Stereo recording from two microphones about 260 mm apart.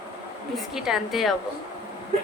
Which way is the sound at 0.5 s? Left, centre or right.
Centre.